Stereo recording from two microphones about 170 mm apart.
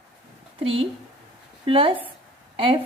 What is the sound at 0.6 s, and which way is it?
Speech, 35° right (ahead or behind).